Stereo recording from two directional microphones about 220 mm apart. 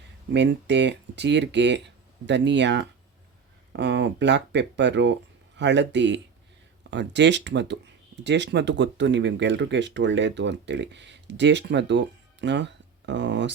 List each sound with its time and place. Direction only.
0.3 s speech: 50° right (ahead or behind)